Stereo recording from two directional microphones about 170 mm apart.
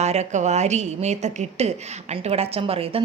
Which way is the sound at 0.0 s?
40° right (ahead or behind).